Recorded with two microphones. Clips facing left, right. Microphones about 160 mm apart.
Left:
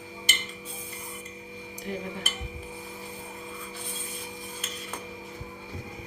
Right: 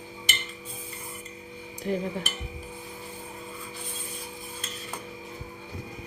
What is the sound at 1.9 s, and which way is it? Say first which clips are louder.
Speech: right 6 dB; 35° right (ahead or behind).